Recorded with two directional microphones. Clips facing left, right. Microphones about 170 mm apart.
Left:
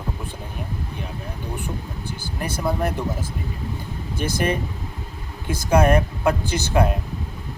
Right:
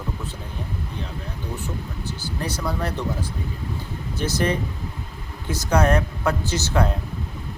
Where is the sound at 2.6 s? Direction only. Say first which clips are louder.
Left 5 dB; 20° left (ahead or behind).